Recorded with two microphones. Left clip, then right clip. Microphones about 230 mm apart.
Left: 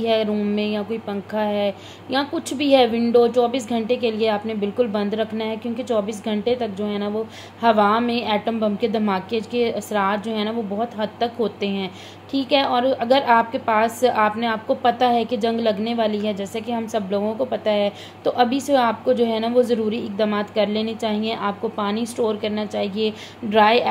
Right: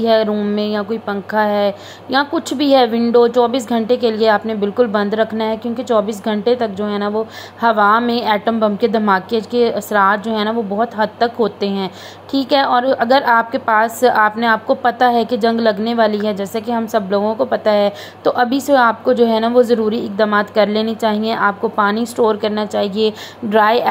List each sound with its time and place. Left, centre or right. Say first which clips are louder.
0.0 s a woman's voice: right 6 dB; centre